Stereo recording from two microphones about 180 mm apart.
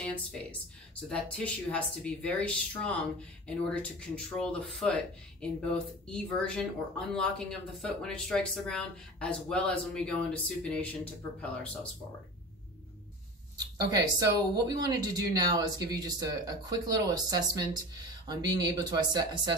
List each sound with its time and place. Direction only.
0.0 s speech: 5° left (ahead or behind)
6.0 s speech: 5° left (ahead or behind)
13.6 s speech: 20° right (ahead or behind)